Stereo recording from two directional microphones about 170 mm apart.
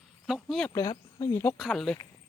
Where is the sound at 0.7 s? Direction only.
25° left (ahead or behind).